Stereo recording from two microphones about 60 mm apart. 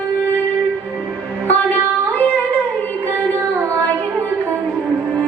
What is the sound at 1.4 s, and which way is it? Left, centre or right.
Music, left.